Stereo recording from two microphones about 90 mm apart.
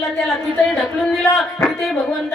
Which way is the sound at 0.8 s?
Centre (ahead or behind).